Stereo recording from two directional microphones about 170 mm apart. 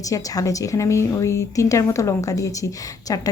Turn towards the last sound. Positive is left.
turn(degrees=20)  # may be behind; listen again after turning